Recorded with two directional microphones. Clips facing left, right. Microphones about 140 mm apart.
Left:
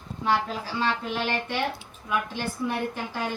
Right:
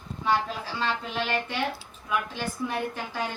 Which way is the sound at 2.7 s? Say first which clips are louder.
Left 2 dB; 10° left (ahead or behind).